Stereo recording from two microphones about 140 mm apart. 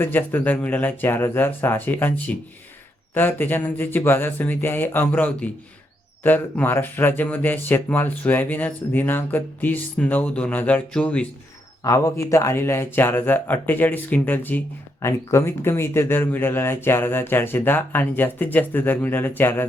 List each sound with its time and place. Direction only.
0.0 s speech: 15° left (ahead or behind)
11.8 s speech: 20° left (ahead or behind)